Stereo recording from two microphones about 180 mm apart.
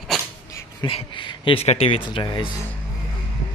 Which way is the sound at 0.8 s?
30° left (ahead or behind).